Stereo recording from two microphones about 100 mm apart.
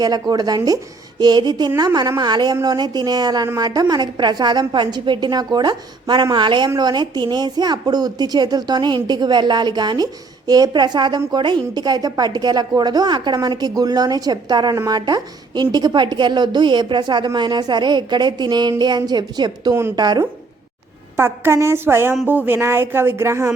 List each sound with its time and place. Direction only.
0.0 s a woman's voice: 40° right (ahead or behind)
21.2 s speech: 25° right (ahead or behind)